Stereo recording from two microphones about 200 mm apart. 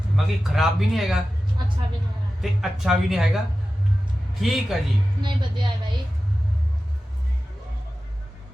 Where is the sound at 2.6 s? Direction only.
Centre (ahead or behind).